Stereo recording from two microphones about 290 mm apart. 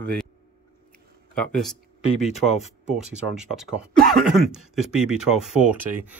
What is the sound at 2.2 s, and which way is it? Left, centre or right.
Speech, left.